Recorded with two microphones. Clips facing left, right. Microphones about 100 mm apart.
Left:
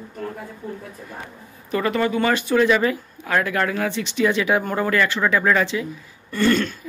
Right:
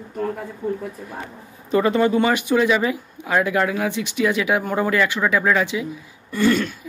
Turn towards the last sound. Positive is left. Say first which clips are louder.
# right 1 dB
turn(degrees=-10)  # may be behind; listen again after turning